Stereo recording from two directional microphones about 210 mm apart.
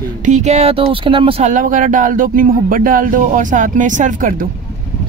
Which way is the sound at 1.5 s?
40° right (ahead or behind).